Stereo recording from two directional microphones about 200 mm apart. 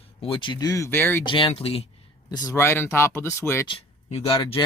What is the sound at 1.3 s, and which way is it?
Speech, 25° left (ahead or behind).